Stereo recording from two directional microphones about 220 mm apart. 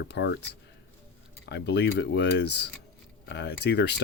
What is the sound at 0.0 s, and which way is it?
Speech, 50° left (ahead or behind).